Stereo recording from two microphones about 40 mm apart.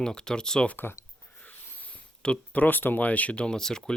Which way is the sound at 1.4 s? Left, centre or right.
Left.